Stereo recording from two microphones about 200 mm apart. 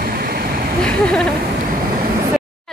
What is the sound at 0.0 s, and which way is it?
Vehicle, 50° right (ahead or behind).